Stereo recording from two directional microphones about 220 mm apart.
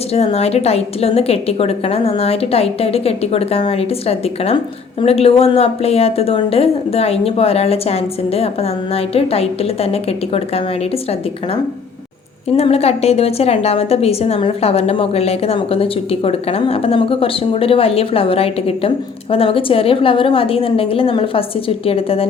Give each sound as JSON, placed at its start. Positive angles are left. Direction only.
{"t": 0.1, "sound": "a woman's voice", "side_deg": 30}
{"t": 12.5, "sound": "a woman's voice", "side_deg": 30}